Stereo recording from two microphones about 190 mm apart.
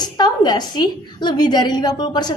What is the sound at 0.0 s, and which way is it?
A woman's voice, 20° left (ahead or behind).